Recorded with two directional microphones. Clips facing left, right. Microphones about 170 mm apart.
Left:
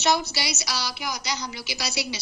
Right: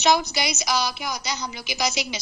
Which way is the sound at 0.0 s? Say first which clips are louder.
Right 3 dB; 15° right (ahead or behind).